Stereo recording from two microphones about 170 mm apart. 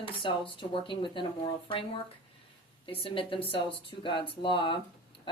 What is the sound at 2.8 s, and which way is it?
A woman's voice, 30° left (ahead or behind).